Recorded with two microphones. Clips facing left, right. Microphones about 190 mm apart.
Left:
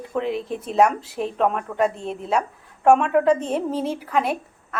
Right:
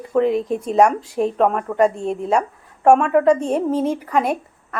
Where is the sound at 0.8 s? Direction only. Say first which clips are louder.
Right 3 dB; 5° left (ahead or behind).